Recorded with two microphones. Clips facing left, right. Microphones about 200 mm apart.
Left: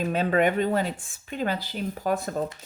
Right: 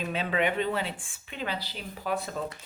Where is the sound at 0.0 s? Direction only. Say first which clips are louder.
Left 6 dB; 45° left (ahead or behind).